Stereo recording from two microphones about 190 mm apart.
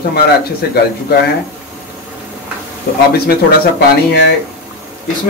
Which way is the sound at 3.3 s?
60° left (ahead or behind).